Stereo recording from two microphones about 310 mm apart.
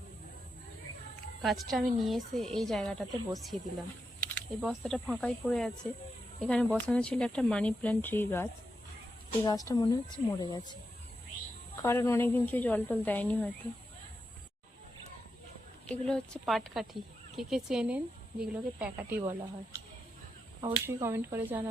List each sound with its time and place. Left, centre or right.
1.4 s a woman's voice: centre
11.8 s speech: centre
16.0 s speech: centre
19.2 s speech: centre